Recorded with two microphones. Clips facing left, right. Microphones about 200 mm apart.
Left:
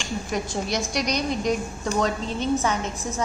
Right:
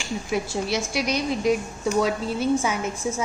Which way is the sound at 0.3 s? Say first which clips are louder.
Right 2 dB; 5° right (ahead or behind).